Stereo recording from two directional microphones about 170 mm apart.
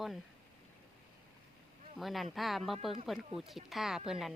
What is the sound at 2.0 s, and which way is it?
Speech, centre (ahead or behind).